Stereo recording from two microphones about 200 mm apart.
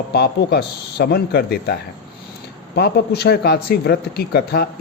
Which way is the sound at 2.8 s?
55° left (ahead or behind).